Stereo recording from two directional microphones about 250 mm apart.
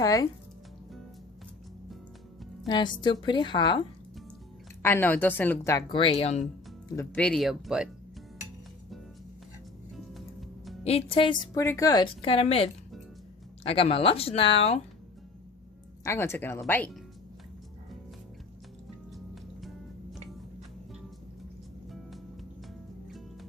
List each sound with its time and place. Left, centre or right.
0.0 s a woman's voice: centre
2.6 s a woman's voice: centre
4.8 s a woman's voice: centre; by 6.4 s left
6.8 s speech: centre
10.8 s a woman's voice: left
16.0 s a woman's voice: centre
19.1 s music: centre
23.0 s music: centre